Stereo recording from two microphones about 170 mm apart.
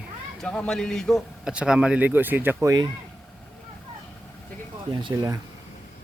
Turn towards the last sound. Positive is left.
turn(degrees=-20)  # may be behind; listen again after turning